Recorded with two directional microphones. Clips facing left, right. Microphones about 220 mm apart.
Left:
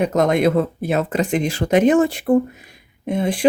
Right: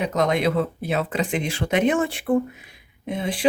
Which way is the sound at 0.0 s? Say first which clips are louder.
Left 5 dB; 50° left (ahead or behind).